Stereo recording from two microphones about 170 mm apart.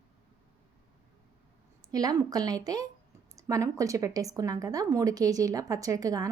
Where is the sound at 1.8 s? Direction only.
20° right (ahead or behind).